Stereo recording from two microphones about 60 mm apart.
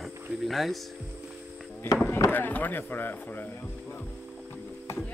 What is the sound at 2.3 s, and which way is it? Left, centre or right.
Speech, left.